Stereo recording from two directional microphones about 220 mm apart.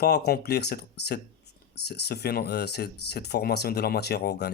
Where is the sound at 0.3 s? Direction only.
45° left (ahead or behind).